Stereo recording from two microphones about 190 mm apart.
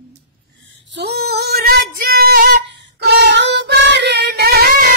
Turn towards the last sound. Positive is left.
turn(degrees=-55)  # may be behind; listen again after turning